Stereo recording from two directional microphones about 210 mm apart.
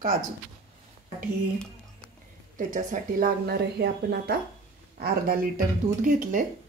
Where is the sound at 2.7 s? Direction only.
40° right (ahead or behind).